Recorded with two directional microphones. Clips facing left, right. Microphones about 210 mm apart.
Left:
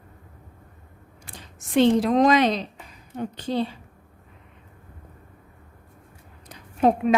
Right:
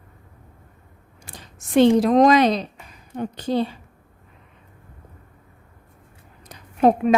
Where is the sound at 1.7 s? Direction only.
45° right (ahead or behind).